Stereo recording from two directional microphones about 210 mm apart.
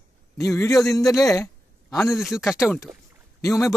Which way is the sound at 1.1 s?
15° left (ahead or behind).